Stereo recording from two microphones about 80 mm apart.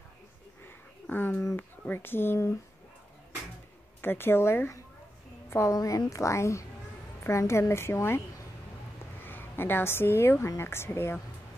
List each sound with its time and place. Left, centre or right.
1.1 s a sound: left
1.6 s speech: left
4.0 s a woman's voice: left